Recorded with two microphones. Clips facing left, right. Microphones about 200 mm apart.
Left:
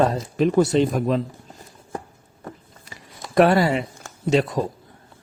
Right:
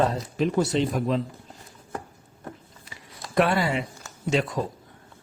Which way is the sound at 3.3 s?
40° left (ahead or behind).